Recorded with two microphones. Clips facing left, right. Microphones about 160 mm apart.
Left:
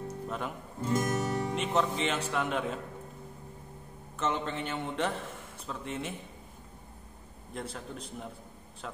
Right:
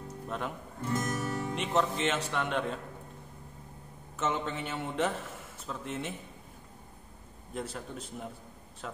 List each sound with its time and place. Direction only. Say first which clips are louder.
0.3 s speech: even; centre (ahead or behind)
0.8 s music: left 3 dB; 25° left (ahead or behind)
1.5 s speech: right 2 dB; centre (ahead or behind)
4.2 s speech: even; centre (ahead or behind)
7.5 s speech: right 1 dB; centre (ahead or behind)